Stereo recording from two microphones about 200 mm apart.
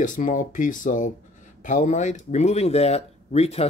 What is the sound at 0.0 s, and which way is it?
Speech, 40° left (ahead or behind).